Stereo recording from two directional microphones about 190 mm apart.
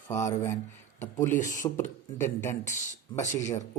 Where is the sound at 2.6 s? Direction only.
40° left (ahead or behind).